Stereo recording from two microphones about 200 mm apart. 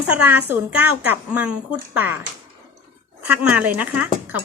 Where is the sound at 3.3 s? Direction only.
5° right (ahead or behind).